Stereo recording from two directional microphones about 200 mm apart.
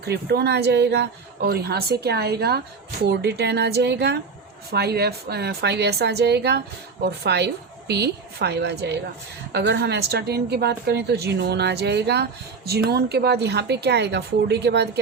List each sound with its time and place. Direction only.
0.0 s a woman's voice: 55° right (ahead or behind)